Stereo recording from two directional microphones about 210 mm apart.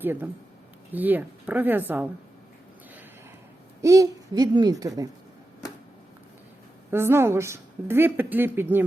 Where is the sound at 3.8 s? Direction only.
15° right (ahead or behind).